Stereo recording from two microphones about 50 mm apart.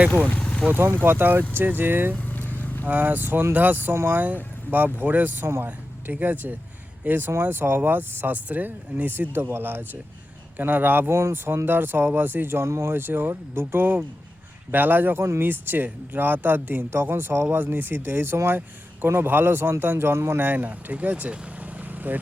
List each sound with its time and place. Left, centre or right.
0.3 s vehicle: left
1.0 s speech: right
2.1 s vehicle: left
2.8 s speech: right
7.4 s speech: right
11.1 s speech: right
11.6 s speech: right
12.5 s speech: right
12.9 s speech: right